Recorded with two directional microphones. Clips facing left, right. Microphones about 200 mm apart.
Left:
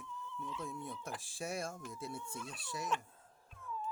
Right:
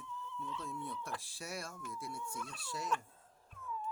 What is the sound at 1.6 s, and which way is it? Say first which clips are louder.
Speech: left 3 dB; 25° left (ahead or behind).